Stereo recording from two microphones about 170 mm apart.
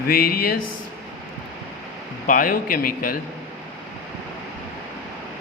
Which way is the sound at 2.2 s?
55° left (ahead or behind).